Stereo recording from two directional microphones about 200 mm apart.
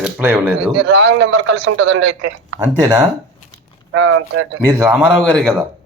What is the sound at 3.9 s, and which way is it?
Speech, 85° right.